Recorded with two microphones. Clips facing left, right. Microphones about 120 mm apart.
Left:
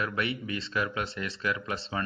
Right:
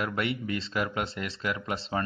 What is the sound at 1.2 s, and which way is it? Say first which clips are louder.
Speech: even; 30° right (ahead or behind).